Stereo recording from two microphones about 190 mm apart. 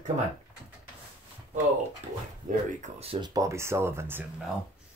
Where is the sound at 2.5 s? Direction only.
40° right (ahead or behind).